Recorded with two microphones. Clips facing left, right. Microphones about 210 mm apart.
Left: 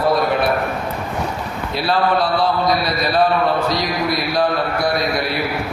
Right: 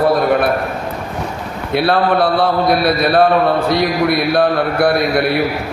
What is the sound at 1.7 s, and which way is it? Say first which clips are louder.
A man's voice: right 4 dB; 60° right (ahead or behind).